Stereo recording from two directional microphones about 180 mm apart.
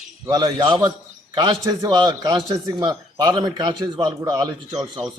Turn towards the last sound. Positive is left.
turn(degrees=-20)  # may be behind; listen again after turning